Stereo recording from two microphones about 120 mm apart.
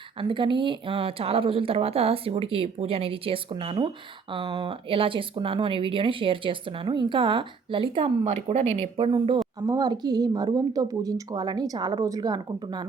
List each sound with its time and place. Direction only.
0.2 s speech: 45° right (ahead or behind); by 8.9 s 60° right (ahead or behind)
9.0 s speech: 45° right (ahead or behind)
9.6 s a woman's voice: 30° right (ahead or behind)